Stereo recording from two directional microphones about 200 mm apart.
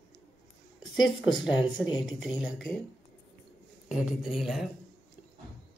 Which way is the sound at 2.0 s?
Centre (ahead or behind).